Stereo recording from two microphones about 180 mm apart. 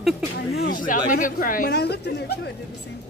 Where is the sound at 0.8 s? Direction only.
50° left (ahead or behind); by 2.5 s 65° left (ahead or behind).